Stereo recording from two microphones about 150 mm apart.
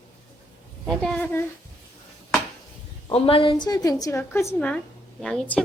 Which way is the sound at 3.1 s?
35° left (ahead or behind).